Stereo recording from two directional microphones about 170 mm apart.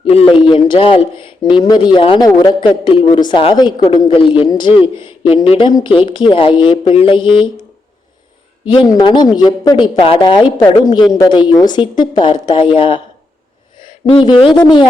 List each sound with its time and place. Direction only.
0.1 s speech: 35° left (ahead or behind)
8.7 s speech: 25° left (ahead or behind)